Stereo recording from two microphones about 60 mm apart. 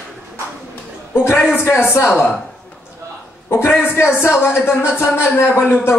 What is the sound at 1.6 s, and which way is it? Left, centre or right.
Speech, left.